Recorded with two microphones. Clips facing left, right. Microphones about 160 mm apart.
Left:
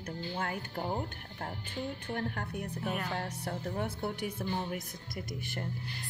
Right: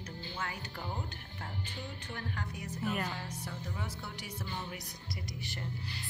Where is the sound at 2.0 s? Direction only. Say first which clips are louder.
Left 5 dB; 50° left (ahead or behind).